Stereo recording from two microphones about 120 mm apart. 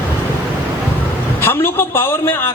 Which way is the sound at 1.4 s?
20° left (ahead or behind).